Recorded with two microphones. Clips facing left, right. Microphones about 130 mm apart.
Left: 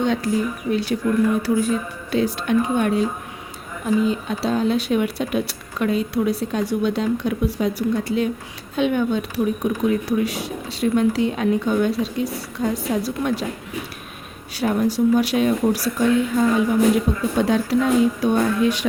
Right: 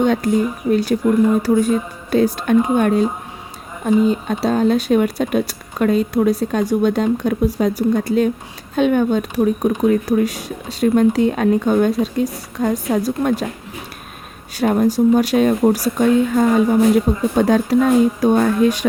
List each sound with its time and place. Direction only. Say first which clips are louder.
0.0 s speech: right 5 dB; 50° right (ahead or behind)
0.3 s speech: right 5 dB; 20° right (ahead or behind)
0.7 s speech: right 6 dB; 45° right (ahead or behind)
1.0 s speech: right 4 dB; 20° right (ahead or behind)
1.4 s speech: right 4 dB; 40° right (ahead or behind)
14.6 s speech: right 4 dB; 45° right (ahead or behind)